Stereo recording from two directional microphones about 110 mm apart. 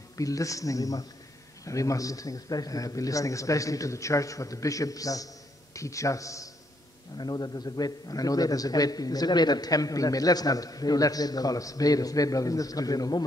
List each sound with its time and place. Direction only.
0.2 s a man's voice: 30° left (ahead or behind)